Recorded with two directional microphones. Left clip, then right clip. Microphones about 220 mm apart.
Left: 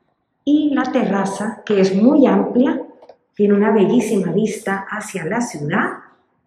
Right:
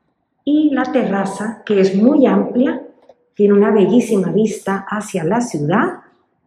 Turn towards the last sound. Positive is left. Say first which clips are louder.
# right 3 dB
turn(degrees=-5)  # may be behind; listen again after turning